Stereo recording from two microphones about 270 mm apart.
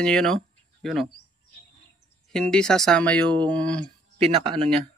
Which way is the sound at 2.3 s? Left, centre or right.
Centre.